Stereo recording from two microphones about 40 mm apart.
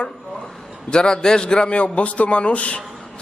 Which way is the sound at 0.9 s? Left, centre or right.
Centre.